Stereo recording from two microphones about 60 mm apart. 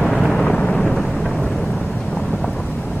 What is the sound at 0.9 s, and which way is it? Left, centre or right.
Thunder, centre.